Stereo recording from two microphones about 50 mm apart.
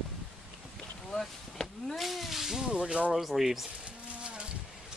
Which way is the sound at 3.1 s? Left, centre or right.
Centre.